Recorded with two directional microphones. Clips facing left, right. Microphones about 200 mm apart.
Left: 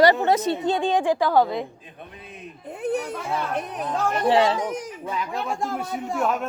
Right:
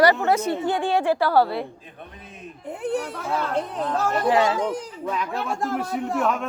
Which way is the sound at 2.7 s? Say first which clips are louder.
Even; 20° left (ahead or behind).